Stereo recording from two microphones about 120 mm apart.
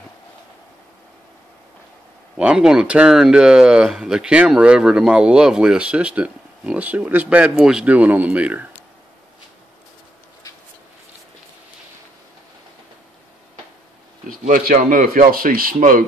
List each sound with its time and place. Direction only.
2.3 s speech: 10° right (ahead or behind)
14.4 s speech: 90° right